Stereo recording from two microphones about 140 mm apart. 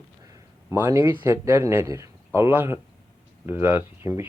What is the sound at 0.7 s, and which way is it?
Speech, 20° right (ahead or behind).